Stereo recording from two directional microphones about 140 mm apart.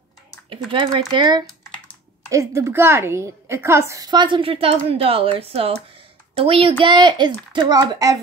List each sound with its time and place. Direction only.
0.7 s a child's voice: 35° right (ahead or behind)
2.2 s a woman's voice: 20° right (ahead or behind)